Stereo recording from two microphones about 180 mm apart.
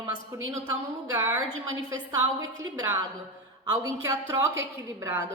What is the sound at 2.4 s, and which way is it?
A woman's voice, 20° right (ahead or behind).